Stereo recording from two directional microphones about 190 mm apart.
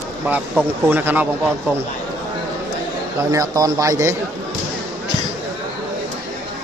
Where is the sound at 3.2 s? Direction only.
20° right (ahead or behind).